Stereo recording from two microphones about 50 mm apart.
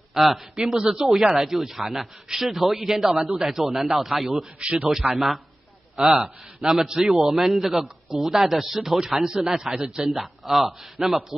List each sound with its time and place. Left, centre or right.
0.1 s a man's voice: centre
0.7 s speech: centre
1.0 s speech: centre
4.6 s speech: right
5.9 s a man's voice: centre